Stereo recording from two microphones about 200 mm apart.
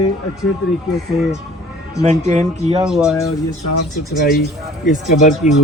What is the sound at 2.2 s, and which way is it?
Speech, 35° right (ahead or behind).